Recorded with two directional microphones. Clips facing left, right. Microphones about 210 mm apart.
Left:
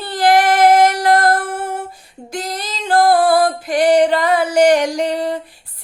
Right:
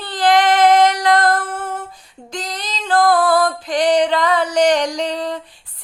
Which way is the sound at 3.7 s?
10° left (ahead or behind).